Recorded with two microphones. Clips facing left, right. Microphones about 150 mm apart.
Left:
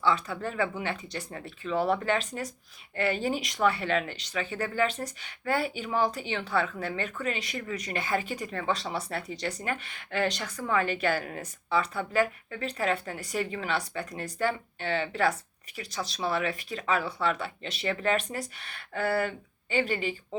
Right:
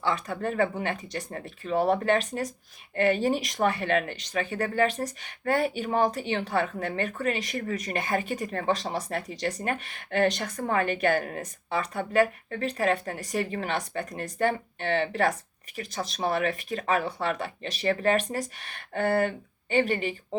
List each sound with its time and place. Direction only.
0.0 s a woman's voice: 45° right (ahead or behind)